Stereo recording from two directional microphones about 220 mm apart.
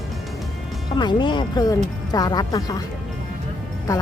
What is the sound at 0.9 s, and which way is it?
Speech, 20° left (ahead or behind).